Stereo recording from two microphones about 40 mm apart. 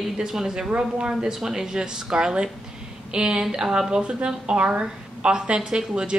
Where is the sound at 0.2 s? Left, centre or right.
Centre.